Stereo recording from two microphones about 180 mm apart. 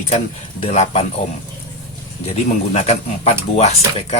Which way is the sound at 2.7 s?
35° left (ahead or behind).